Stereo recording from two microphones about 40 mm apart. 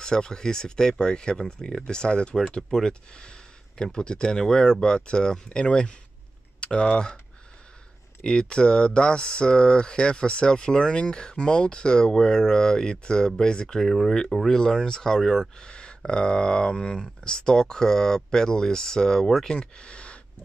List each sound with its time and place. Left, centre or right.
0.0 s speech: centre
8.2 s speech: left
13.7 s speech: centre
14.1 s speech: centre
15.6 s a sound: left
16.0 s speech: left